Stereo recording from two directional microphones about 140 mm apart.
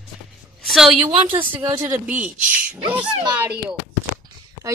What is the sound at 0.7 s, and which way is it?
Speech, centre (ahead or behind).